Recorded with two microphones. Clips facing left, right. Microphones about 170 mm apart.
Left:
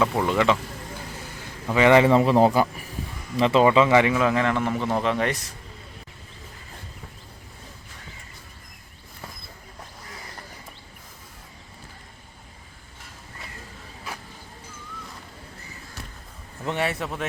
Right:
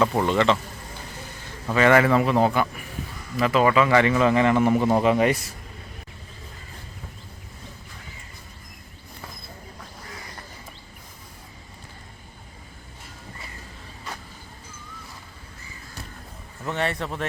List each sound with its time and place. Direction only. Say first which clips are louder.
0.0 s speech: right 1 dB; centre (ahead or behind)
1.6 s a man's voice: left 1 dB; 15° left (ahead or behind)
4.1 s speech: right 3 dB; centre (ahead or behind)
14.1 s vehicle: even; 5° left (ahead or behind)
16.6 s a sound: even; 10° left (ahead or behind)